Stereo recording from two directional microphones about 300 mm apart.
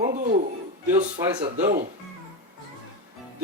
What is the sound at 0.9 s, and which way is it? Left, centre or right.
Speech, centre.